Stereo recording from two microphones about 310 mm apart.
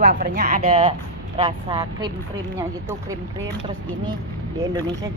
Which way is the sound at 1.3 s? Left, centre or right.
Centre.